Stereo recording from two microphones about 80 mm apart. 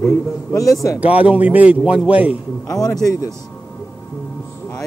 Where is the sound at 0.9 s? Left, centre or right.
Centre.